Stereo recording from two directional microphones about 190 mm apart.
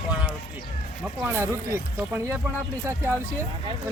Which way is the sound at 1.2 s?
15° right (ahead or behind).